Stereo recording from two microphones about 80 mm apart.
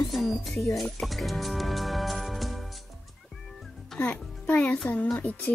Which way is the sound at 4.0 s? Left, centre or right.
Centre.